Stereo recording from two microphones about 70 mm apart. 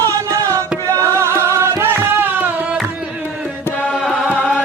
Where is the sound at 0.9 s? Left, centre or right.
Right.